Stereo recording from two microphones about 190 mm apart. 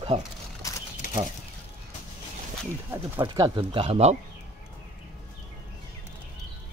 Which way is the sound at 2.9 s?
20° right (ahead or behind).